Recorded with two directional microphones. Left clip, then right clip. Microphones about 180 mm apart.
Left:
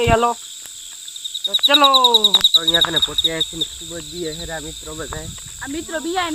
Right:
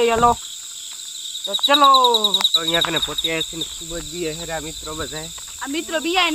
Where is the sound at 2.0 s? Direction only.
30° left (ahead or behind).